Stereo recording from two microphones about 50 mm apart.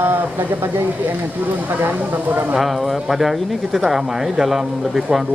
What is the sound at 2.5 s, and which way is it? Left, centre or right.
Speech, centre.